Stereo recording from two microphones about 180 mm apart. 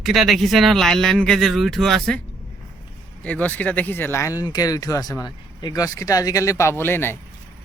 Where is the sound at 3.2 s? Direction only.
10° left (ahead or behind).